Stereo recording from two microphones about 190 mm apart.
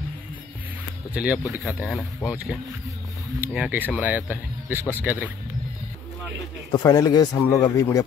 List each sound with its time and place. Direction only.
1.1 s speech: 5° right (ahead or behind)
6.7 s speech: 20° left (ahead or behind)